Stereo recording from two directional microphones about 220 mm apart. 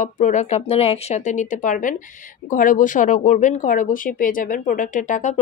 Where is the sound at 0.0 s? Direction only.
35° left (ahead or behind).